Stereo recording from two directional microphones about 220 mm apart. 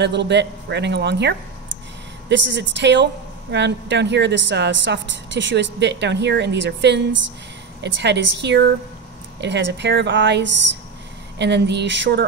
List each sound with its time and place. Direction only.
0.0 s a woman's voice: 50° right (ahead or behind)